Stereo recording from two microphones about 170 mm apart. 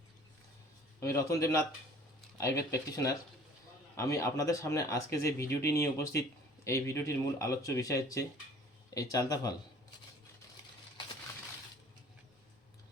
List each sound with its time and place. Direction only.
0.9 s a man's voice: 15° left (ahead or behind)